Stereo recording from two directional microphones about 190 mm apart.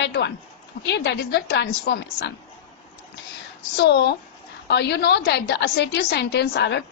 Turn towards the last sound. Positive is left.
turn(degrees=65)  # may be behind; listen again after turning